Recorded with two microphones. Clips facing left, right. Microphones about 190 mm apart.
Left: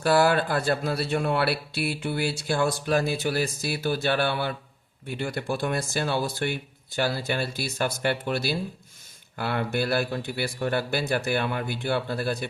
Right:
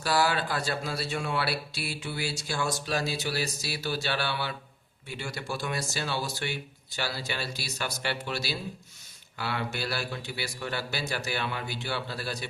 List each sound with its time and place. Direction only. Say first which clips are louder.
0.0 s speech: left 6 dB; 55° left (ahead or behind)